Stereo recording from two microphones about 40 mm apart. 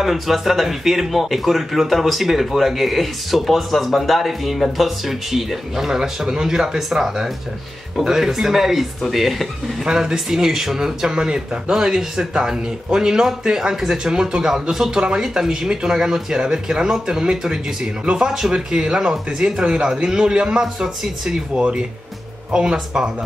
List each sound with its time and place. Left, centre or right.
0.0 s a man's voice: centre
9.8 s speech: centre
21.5 s speech: right